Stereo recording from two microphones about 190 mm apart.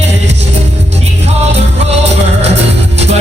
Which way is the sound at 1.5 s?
35° right (ahead or behind).